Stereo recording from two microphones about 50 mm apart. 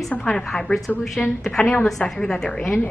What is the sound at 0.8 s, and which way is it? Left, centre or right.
Speech, centre.